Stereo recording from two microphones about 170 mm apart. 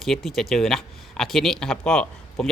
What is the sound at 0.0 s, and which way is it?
Speech, centre (ahead or behind).